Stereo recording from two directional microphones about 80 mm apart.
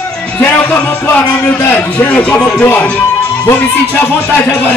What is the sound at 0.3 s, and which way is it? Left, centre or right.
A man's voice, centre.